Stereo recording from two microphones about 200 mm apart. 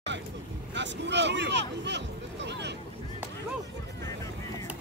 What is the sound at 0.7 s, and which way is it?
Speech, 60° right (ahead or behind).